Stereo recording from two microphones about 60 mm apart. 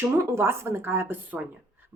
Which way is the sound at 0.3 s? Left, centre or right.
Right.